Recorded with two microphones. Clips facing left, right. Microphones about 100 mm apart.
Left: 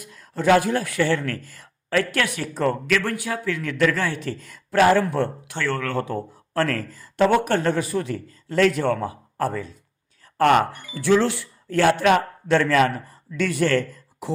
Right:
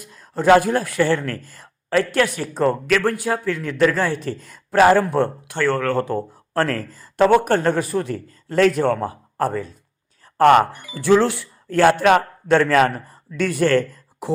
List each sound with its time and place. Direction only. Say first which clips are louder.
0.0 s speech: right 3 dB; 35° right (ahead or behind)